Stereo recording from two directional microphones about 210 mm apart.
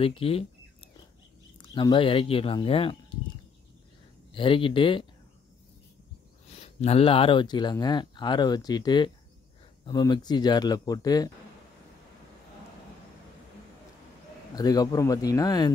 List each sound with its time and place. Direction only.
0.0 s speech: 25° left (ahead or behind)
1.6 s speech: 25° left (ahead or behind)
4.3 s speech: 25° left (ahead or behind)
6.5 s speech: 30° left (ahead or behind)
14.5 s speech: 20° left (ahead or behind)